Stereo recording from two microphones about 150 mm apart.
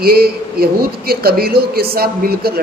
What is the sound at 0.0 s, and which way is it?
A man's voice, 90° right.